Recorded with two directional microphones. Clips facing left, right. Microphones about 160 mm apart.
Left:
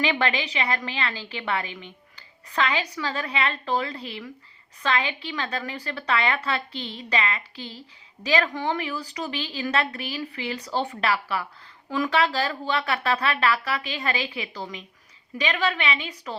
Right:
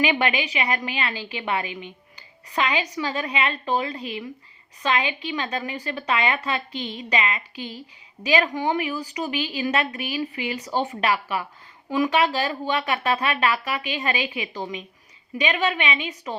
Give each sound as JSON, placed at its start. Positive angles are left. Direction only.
{"t": 0.0, "sound": "a woman's voice", "side_deg": -15}